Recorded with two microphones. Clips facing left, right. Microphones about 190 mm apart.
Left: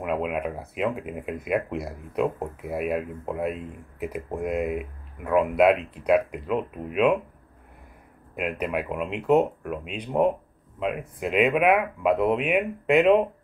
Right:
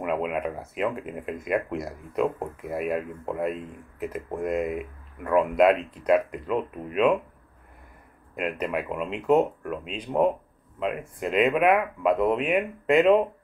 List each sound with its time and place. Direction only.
0.0 s speech: centre (ahead or behind)
8.4 s speech: 5° left (ahead or behind)